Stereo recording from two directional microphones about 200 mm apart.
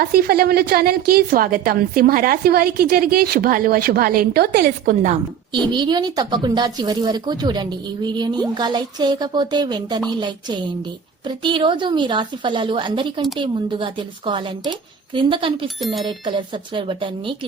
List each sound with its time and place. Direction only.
0.0 s a woman's voice: 50° right (ahead or behind)
5.7 s speech: 20° right (ahead or behind)